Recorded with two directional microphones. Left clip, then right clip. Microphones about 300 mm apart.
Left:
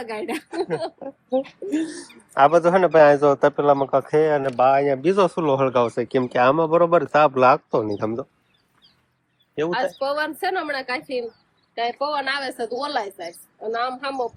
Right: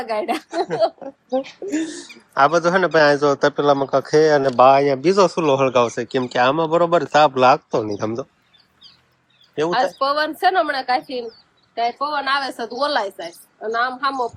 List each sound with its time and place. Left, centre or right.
0.0 s a woman's voice: centre
0.4 s speech: centre
10.0 s a woman's voice: centre
13.2 s a woman's voice: right
13.7 s a woman's voice: centre